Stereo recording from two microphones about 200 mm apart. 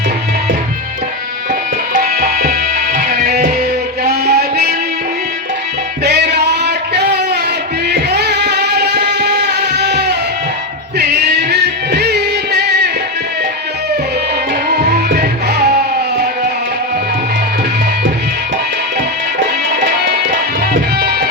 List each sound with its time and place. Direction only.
1.9 s music: 45° right (ahead or behind)
6.1 s a sound: 55° right (ahead or behind)
7.9 s music: 55° right (ahead or behind)
14.9 s music: 50° right (ahead or behind)
21.0 s music: 50° right (ahead or behind)